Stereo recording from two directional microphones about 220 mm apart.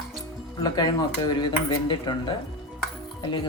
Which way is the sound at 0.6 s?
20° left (ahead or behind).